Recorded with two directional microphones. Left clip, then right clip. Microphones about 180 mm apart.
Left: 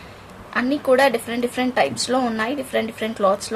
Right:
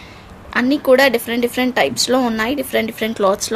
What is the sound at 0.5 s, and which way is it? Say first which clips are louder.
Speech: right 5 dB; 45° right (ahead or behind).